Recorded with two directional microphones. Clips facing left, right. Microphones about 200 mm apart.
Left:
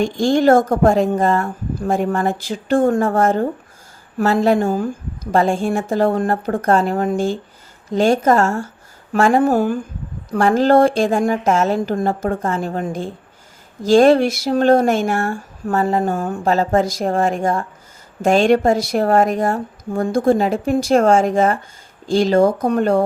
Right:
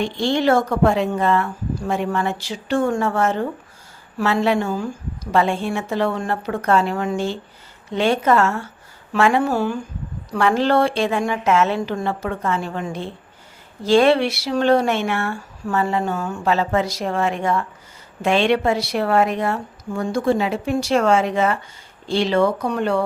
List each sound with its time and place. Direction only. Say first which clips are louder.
0.0 s a woman's voice: left 5 dB; 45° left (ahead or behind)